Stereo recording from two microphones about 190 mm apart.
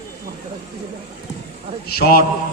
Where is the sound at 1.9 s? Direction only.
50° left (ahead or behind).